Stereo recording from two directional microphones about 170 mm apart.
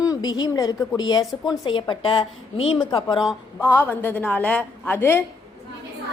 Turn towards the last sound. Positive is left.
turn(degrees=15)  # may be behind; listen again after turning